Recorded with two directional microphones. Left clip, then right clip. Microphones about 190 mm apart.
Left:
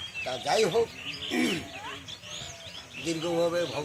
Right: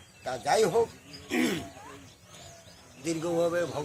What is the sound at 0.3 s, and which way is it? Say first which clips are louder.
A man's voice: right 1 dB; 10° right (ahead or behind).